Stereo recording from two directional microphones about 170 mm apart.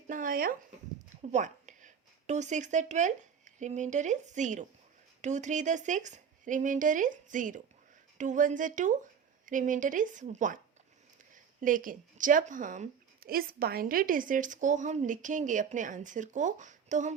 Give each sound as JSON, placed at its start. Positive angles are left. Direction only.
{"t": 0.1, "sound": "a sound", "side_deg": -55}
{"t": 1.1, "sound": "a woman's voice", "side_deg": -45}
{"t": 11.6, "sound": "a woman's voice", "side_deg": -55}